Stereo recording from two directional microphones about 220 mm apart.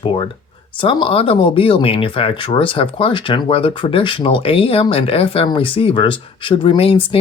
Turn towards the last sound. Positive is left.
turn(degrees=25)  # may be behind; listen again after turning